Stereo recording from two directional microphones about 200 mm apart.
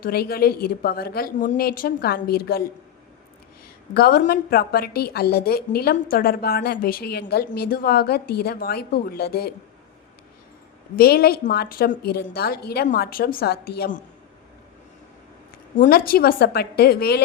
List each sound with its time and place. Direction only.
0.0 s a woman's voice: 50° left (ahead or behind)
3.9 s a woman's voice: 45° left (ahead or behind)
10.9 s a woman's voice: 50° left (ahead or behind)
15.8 s a woman's voice: 50° left (ahead or behind)